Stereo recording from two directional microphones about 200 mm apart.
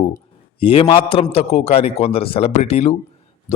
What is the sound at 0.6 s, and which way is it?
A man's voice, 25° left (ahead or behind).